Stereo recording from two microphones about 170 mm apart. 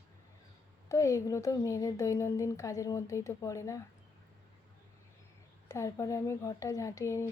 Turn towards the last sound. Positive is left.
turn(degrees=20)  # may be behind; listen again after turning